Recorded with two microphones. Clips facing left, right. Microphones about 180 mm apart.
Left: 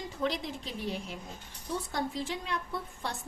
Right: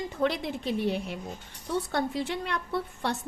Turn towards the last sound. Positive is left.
turn(degrees=-70)  # may be behind; listen again after turning